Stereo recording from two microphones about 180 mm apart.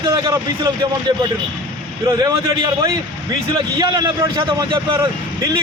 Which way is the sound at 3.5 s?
25° right (ahead or behind).